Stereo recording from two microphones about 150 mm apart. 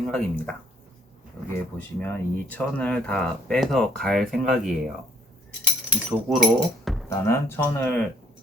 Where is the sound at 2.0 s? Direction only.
10° left (ahead or behind).